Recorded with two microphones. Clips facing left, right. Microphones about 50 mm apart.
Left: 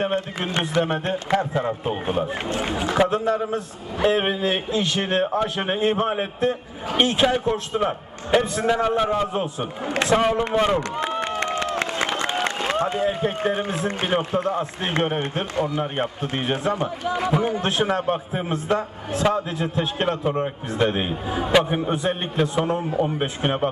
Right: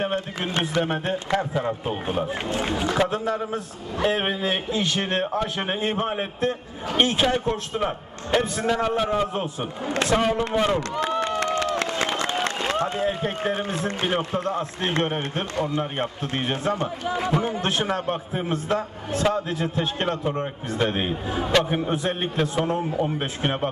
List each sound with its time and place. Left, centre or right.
0.0 s a man's voice: centre
11.0 s a sound: left
12.6 s a man's voice: centre